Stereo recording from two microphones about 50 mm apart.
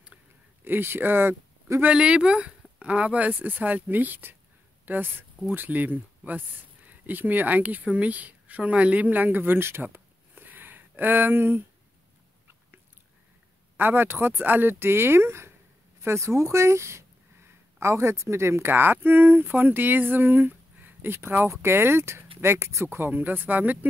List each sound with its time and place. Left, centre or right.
0.7 s speech: right
1.9 s speech: centre; by 9.8 s right
9.9 s a sound: right
13.7 s speech: right
18.7 s speech: right